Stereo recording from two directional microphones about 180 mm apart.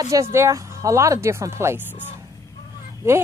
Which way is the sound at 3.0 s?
15° right (ahead or behind).